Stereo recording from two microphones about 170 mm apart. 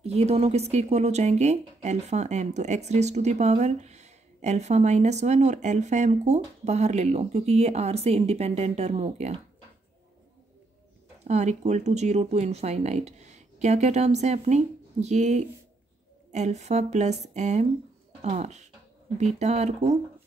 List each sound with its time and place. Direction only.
0.0 s speech: 40° right (ahead or behind)
11.2 s a woman's voice: 40° right (ahead or behind)